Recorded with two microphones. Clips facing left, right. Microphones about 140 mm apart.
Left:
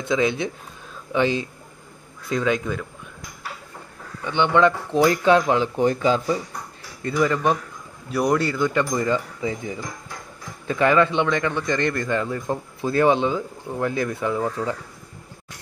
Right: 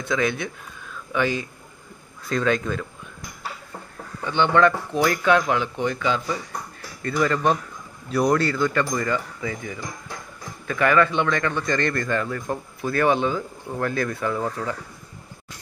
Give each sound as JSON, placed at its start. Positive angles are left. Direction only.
{"t": 0.1, "sound": "a man's voice", "side_deg": 20}
{"t": 2.2, "sound": "speech", "side_deg": 15}
{"t": 4.3, "sound": "a man's voice", "side_deg": 20}
{"t": 7.0, "sound": "a man's voice", "side_deg": 15}